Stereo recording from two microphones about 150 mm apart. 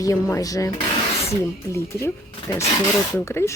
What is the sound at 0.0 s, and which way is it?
A woman's voice, 20° left (ahead or behind).